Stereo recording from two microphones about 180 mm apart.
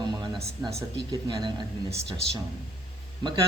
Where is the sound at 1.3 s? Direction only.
25° right (ahead or behind).